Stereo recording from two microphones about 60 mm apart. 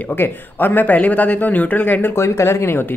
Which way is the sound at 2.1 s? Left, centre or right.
Left.